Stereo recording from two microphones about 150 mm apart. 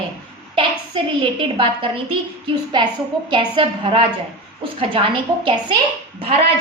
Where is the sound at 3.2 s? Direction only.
35° right (ahead or behind).